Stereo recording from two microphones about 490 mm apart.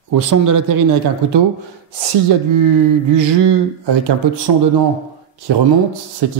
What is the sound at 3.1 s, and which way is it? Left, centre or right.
Speech, right.